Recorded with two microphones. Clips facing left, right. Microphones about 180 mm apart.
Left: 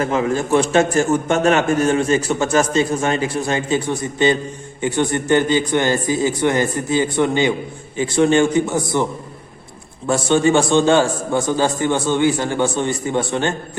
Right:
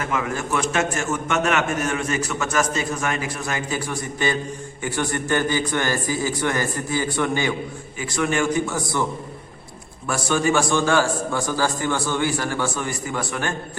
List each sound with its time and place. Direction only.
0.0 s a man's voice: 30° left (ahead or behind)
10.1 s a man's voice: 25° left (ahead or behind)